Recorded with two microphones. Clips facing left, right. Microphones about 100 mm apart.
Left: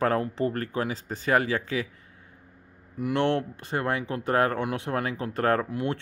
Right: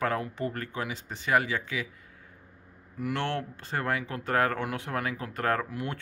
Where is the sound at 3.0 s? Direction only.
20° left (ahead or behind).